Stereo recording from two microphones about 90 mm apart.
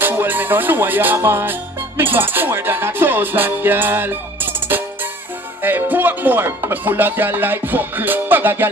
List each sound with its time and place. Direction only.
0.0 s music: 20° right (ahead or behind)
5.6 s speech: 20° right (ahead or behind)